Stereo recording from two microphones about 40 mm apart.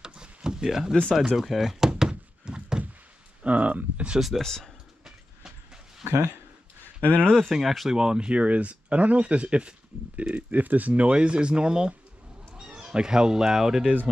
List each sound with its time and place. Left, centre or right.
0.0 s a sound: centre
0.7 s speech: centre
2.0 s thunk: right
3.4 s speech: right
4.4 s speech: centre
7.0 s speech: left
7.4 s speech: centre
7.9 s speech: centre